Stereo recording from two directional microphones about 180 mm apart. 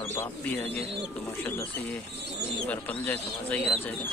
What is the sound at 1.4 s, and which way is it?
Speech, 10° left (ahead or behind).